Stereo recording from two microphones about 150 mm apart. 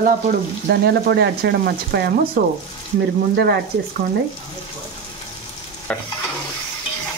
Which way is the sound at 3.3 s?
90° right.